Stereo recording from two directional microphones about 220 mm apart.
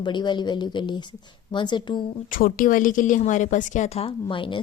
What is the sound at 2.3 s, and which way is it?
A woman's voice, 40° left (ahead or behind).